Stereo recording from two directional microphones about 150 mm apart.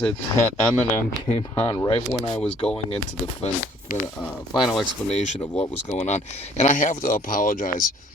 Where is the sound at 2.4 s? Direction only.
5° left (ahead or behind).